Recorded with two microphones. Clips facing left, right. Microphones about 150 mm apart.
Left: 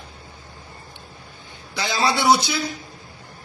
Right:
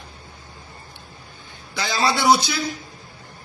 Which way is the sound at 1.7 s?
20° left (ahead or behind).